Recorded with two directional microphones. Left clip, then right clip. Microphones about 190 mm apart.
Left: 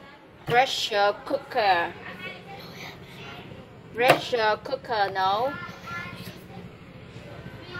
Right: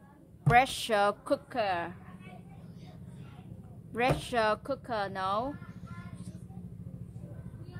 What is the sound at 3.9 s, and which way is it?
A woman's voice, 45° right (ahead or behind).